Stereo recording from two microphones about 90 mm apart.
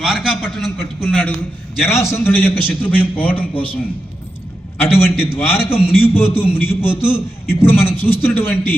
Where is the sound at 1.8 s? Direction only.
30° left (ahead or behind).